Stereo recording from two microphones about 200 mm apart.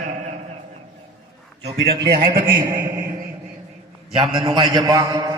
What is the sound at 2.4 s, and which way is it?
Speech, 45° right (ahead or behind).